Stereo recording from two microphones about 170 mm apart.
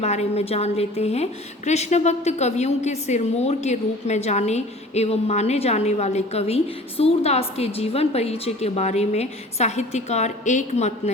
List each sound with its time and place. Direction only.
0.0 s a woman's voice: 40° left (ahead or behind)